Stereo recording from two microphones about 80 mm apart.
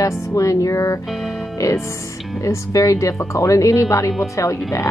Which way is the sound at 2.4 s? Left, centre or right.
Left.